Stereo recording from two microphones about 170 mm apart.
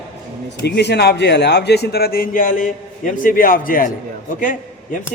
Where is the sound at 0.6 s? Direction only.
80° left; by 3.9 s 55° left (ahead or behind).